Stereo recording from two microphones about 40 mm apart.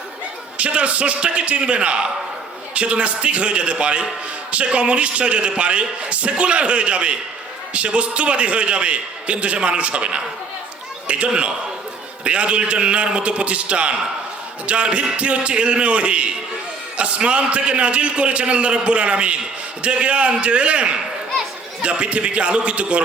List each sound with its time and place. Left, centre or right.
0.5 s a man's voice: right